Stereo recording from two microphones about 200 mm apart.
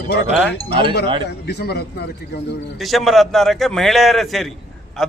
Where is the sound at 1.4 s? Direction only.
55° left (ahead or behind).